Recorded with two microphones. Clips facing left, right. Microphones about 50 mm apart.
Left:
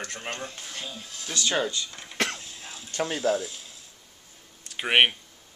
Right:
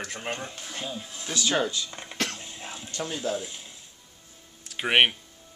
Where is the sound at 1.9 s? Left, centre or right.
Right.